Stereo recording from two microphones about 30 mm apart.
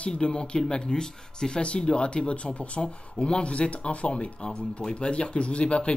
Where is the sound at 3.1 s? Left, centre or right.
Left.